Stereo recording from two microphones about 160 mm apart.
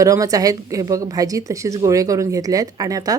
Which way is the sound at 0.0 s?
20° right (ahead or behind).